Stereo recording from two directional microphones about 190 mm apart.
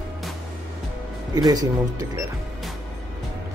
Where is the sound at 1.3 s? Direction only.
20° right (ahead or behind).